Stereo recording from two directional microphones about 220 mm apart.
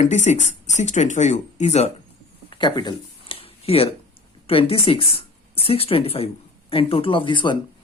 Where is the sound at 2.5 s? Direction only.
20° left (ahead or behind).